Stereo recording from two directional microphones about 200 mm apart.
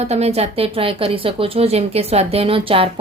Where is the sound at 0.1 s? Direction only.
30° right (ahead or behind).